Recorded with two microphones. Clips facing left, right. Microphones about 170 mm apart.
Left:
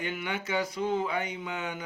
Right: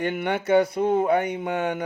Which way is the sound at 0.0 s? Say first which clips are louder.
Right 9 dB; 60° right (ahead or behind).